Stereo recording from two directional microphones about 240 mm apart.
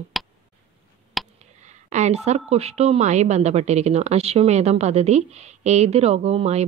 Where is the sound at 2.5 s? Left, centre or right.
Right.